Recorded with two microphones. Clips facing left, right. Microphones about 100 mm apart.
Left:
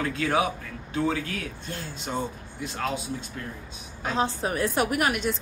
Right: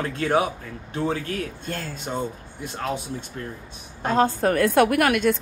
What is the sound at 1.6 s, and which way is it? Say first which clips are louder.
Speech: right 5 dB; 45° right (ahead or behind).